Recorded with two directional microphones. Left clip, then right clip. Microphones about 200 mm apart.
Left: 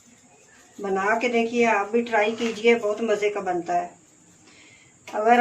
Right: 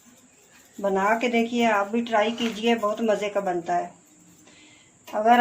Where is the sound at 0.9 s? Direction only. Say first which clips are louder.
Even; 35° right (ahead or behind).